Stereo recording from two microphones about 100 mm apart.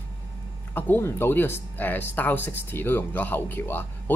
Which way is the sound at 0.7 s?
20° left (ahead or behind).